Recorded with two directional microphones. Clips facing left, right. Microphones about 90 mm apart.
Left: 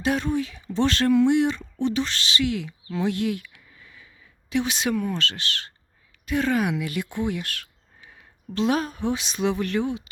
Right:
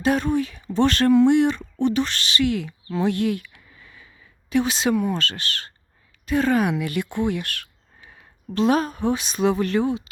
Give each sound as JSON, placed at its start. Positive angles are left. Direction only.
{"t": 0.0, "sound": "speech", "side_deg": -45}
{"t": 4.4, "sound": "speech", "side_deg": -40}
{"t": 5.1, "sound": "speech", "side_deg": -45}
{"t": 8.5, "sound": "speech", "side_deg": -40}